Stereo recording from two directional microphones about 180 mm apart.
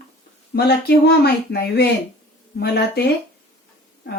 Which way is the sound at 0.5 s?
60° left (ahead or behind).